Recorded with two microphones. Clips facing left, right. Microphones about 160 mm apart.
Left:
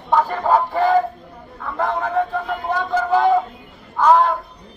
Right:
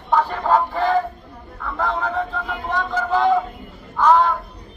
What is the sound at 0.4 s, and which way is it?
Speech, 10° left (ahead or behind).